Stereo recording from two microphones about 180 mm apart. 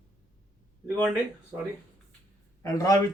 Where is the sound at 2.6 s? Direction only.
20° left (ahead or behind).